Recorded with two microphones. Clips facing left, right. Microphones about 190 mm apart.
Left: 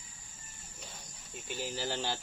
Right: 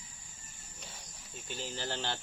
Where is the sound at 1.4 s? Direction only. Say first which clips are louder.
Left 2 dB; 10° left (ahead or behind).